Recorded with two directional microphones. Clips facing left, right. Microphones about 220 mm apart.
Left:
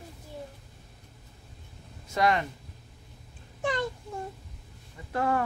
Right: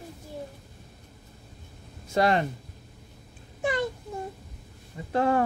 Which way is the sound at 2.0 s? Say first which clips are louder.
Right 3 dB; 30° right (ahead or behind).